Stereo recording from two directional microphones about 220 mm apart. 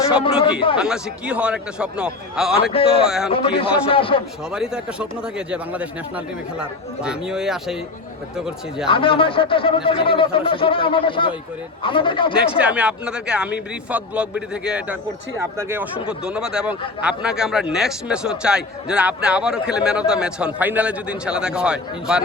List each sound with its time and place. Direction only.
0.1 s speech: 25° left (ahead or behind)
0.8 s a man's voice: 5° right (ahead or behind)
2.7 s speech: 25° left (ahead or behind)
4.5 s a man's voice: 5° right (ahead or behind)
8.9 s speech: 25° left (ahead or behind)
12.5 s a man's voice: 5° right (ahead or behind)